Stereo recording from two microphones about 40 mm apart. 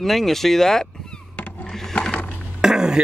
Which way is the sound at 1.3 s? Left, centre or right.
Left.